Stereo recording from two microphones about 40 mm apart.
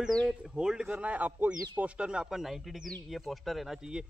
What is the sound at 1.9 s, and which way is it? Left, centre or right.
Speech, right.